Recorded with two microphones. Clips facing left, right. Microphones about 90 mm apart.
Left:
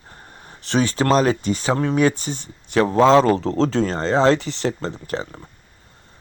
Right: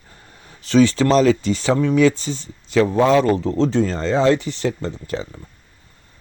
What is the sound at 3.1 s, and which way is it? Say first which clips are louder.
Speech: left 1 dB; 35° left (ahead or behind).